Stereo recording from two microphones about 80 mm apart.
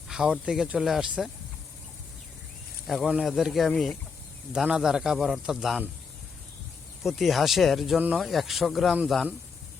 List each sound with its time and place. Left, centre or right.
0.1 s speech: centre
2.8 s speech: centre
4.5 s speech: centre
7.0 s speech: centre
7.9 s speech: centre
8.2 s speech: centre